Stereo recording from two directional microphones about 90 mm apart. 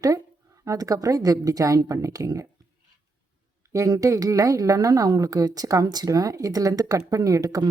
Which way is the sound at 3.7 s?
40° right (ahead or behind).